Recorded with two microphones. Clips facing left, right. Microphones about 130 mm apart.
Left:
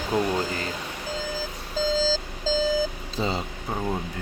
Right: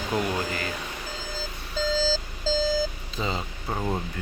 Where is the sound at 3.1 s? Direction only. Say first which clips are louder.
Left 4 dB; 30° left (ahead or behind).